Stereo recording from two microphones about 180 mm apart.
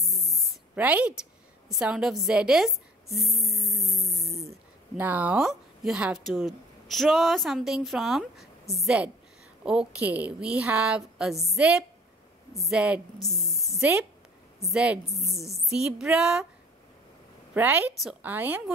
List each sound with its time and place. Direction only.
0.1 s spray: 15° left (ahead or behind)
0.4 s a sound: 5° right (ahead or behind)
1.7 s a woman's voice: 5° right (ahead or behind)
4.9 s a woman's voice: 10° right (ahead or behind)
17.6 s a woman's voice: 10° right (ahead or behind)